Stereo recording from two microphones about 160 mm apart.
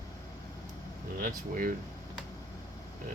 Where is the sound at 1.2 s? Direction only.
60° right (ahead or behind).